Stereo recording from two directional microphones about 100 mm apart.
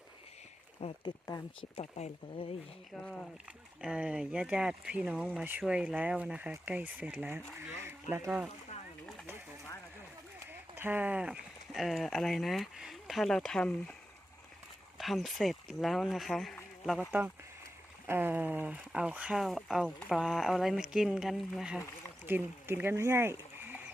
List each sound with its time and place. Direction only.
0.8 s speech: 90° left
2.9 s speech: 10° left (ahead or behind)
3.8 s speech: 10° right (ahead or behind)
7.3 s speech: 25° right (ahead or behind)
10.4 s speech: 20° right (ahead or behind); by 13.9 s 10° left (ahead or behind)
14.9 s speech: centre (ahead or behind)
17.1 s speech: 15° right (ahead or behind)
22.3 s speech: 20° right (ahead or behind)